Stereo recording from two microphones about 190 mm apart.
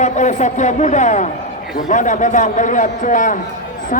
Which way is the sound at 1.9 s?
40° left (ahead or behind).